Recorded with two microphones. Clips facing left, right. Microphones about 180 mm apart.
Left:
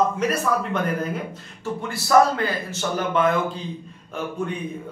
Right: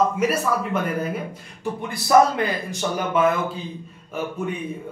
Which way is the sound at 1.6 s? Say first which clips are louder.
Even; 20° right (ahead or behind).